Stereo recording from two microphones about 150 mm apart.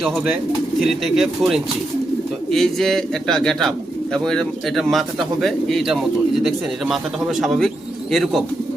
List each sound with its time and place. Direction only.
0.9 s speech: centre (ahead or behind)